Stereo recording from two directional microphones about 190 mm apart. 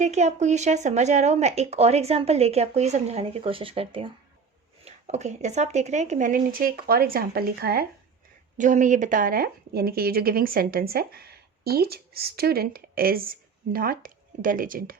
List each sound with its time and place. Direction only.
0.0 s speech: 35° right (ahead or behind); by 7.9 s 55° right (ahead or behind)
8.5 s speech: 40° right (ahead or behind)